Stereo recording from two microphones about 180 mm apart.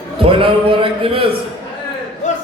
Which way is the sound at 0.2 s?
30° right (ahead or behind).